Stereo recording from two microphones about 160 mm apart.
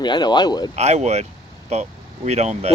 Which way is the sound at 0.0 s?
25° left (ahead or behind).